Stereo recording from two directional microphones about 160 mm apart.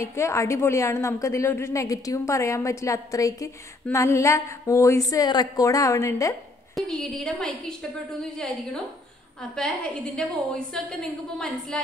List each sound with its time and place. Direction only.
0.0 s a woman's voice: 15° left (ahead or behind)
6.7 s a woman's voice: centre (ahead or behind)
10.1 s a woman's voice: 5° left (ahead or behind)